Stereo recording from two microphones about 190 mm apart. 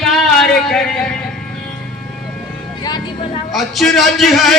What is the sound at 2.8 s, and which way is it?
Vehicle, 20° left (ahead or behind).